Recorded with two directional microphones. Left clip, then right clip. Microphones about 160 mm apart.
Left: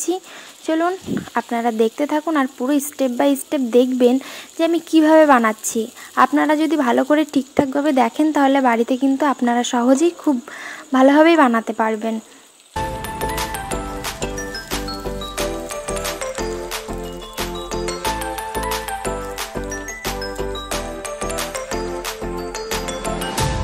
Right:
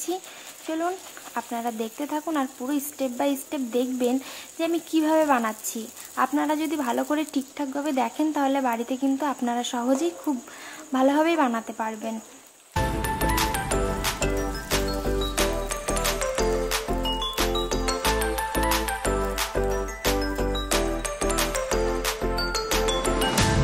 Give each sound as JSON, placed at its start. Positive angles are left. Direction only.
{"t": 0.7, "sound": "speech", "side_deg": 35}
{"t": 12.7, "sound": "music", "side_deg": 0}
{"t": 15.3, "sound": "music", "side_deg": 0}
{"t": 20.0, "sound": "music", "side_deg": 0}